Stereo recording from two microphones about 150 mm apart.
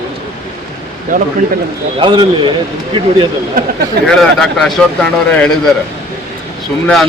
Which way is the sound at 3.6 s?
70° right (ahead or behind).